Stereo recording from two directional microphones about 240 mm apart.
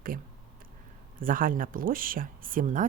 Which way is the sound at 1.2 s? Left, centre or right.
Right.